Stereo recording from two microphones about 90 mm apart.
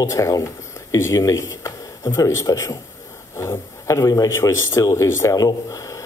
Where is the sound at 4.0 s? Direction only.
40° left (ahead or behind).